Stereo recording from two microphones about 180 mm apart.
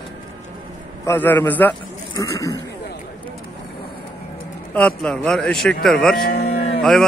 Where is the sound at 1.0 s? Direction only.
10° left (ahead or behind).